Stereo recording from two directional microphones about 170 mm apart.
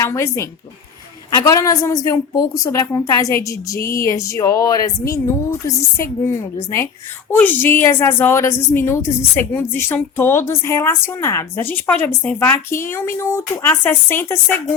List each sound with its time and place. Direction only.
0.0 s speech: 15° left (ahead or behind)
1.5 s a woman's voice: 20° left (ahead or behind)